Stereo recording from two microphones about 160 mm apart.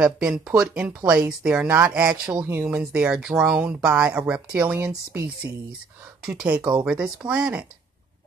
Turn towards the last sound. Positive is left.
turn(degrees=-10)  # may be behind; listen again after turning